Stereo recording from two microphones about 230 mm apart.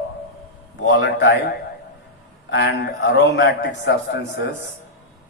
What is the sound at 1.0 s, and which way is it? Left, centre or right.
Speech, left.